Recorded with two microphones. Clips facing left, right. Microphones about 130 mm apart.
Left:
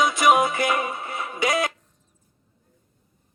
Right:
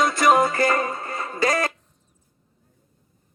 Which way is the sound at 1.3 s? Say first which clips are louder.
Right 2 dB; 20° left (ahead or behind).